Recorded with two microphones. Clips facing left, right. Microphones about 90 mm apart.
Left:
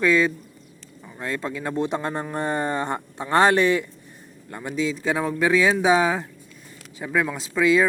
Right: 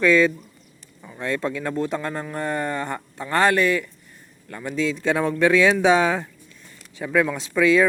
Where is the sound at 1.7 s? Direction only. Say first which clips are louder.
Even; 20° left (ahead or behind).